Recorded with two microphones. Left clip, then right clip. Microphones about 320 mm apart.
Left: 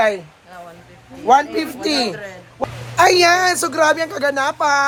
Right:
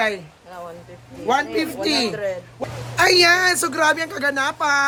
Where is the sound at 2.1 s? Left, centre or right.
Right.